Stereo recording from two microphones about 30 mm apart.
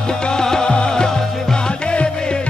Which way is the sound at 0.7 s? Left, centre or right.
Left.